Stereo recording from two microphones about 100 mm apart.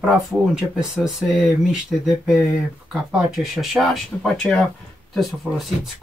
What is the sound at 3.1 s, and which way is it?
Speech, centre (ahead or behind).